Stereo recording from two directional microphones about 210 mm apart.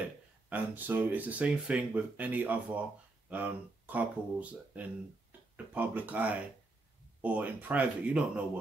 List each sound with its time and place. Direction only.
0.5 s speech: 10° right (ahead or behind)